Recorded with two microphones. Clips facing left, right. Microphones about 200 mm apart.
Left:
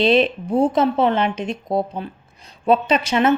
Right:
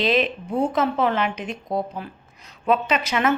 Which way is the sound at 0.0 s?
30° left (ahead or behind).